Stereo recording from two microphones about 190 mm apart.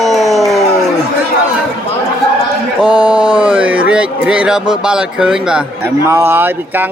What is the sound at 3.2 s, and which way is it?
Speech, 25° right (ahead or behind).